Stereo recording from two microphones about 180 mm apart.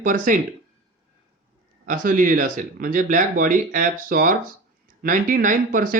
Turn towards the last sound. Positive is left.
turn(degrees=-50)  # may be behind; listen again after turning